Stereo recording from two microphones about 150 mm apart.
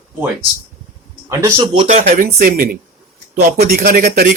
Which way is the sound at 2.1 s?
70° right (ahead or behind).